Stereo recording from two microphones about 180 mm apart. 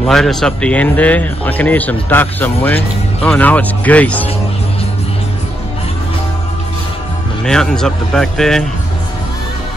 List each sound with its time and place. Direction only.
0.0 s speech: centre (ahead or behind)
7.4 s a man's voice: 5° left (ahead or behind)